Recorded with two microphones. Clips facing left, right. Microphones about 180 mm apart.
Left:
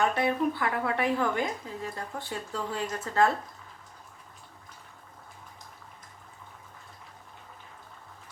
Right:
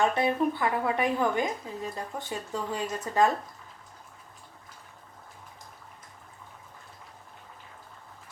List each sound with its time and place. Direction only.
0.2 s a woman's voice: 20° right (ahead or behind)